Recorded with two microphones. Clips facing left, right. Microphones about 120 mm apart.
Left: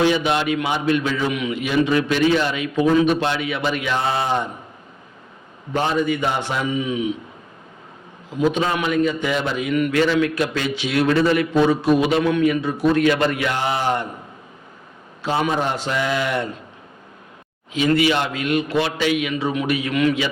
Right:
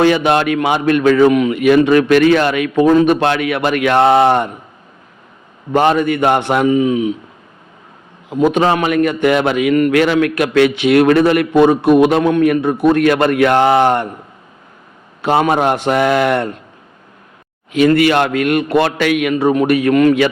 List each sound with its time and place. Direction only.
0.0 s a man's voice: 60° right (ahead or behind)
5.7 s a man's voice: 65° right (ahead or behind); by 7.1 s 45° right (ahead or behind)
8.3 s a man's voice: 60° right (ahead or behind)
15.2 s a man's voice: 65° right (ahead or behind)
17.7 s a man's voice: 60° right (ahead or behind)